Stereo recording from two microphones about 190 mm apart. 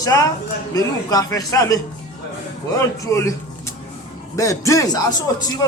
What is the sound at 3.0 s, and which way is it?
Speech, 15° left (ahead or behind).